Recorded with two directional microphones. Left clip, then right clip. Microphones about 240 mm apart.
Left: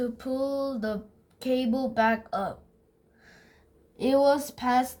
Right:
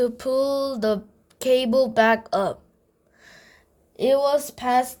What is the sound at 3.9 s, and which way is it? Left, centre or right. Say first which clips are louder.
Speech: right 3 dB; right.